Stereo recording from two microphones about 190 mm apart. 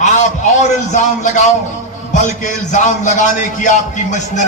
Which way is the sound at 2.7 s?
40° left (ahead or behind).